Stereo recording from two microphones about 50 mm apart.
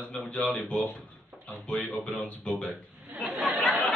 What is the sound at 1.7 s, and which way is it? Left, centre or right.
Speech, left.